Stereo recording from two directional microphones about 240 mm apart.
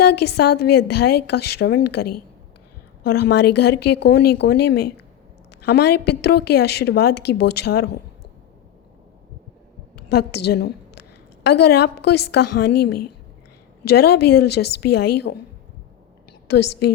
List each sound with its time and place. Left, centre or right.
0.0 s a woman's voice: left
10.1 s a woman's voice: left
16.5 s a woman's voice: left